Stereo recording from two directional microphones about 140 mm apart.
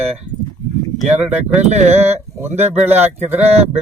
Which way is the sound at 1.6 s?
50° right (ahead or behind).